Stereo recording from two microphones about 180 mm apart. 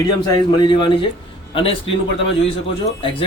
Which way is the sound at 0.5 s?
25° left (ahead or behind).